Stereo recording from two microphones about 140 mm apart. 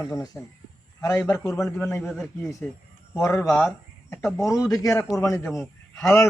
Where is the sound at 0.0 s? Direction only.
25° left (ahead or behind).